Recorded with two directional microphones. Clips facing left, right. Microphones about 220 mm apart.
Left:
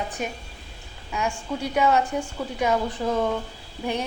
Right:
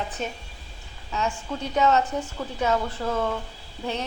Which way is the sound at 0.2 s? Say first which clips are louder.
Left 1 dB; 10° left (ahead or behind).